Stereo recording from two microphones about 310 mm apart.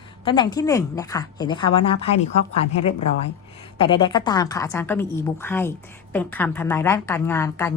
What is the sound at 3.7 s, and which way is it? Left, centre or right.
A woman's voice, centre.